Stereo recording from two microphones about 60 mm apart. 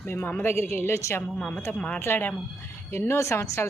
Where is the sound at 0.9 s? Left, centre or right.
Left.